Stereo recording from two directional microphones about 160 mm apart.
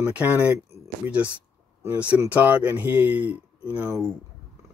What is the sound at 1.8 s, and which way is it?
Speech, 10° right (ahead or behind).